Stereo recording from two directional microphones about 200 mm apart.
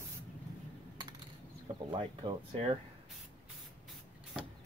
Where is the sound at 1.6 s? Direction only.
25° right (ahead or behind).